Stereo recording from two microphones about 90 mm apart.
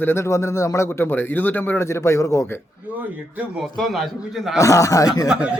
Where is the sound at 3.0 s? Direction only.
15° right (ahead or behind).